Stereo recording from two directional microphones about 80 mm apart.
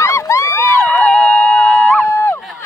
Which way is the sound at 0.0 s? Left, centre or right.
Left.